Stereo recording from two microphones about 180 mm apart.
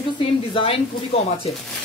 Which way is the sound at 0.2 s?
25° left (ahead or behind).